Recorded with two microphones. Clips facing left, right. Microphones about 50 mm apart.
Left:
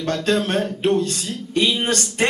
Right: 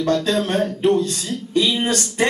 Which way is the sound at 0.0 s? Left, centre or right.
Left.